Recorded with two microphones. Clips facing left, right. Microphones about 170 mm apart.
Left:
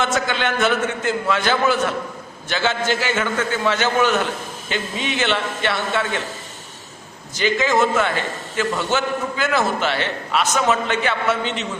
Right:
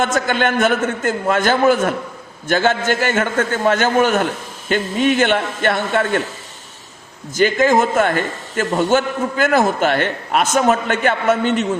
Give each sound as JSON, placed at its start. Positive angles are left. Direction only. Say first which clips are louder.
{"t": 0.0, "sound": "a man's voice", "louder": "right 4 dB", "side_deg": -50}
{"t": 7.3, "sound": "a man's voice", "louder": "right 4 dB", "side_deg": -50}